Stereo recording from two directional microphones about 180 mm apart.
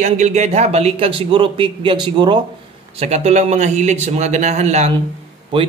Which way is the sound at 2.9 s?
35° right (ahead or behind).